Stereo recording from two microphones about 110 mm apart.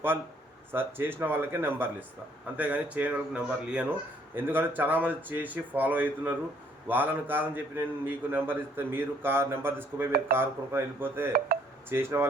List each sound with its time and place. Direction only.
0.7 s a man's voice: 20° right (ahead or behind)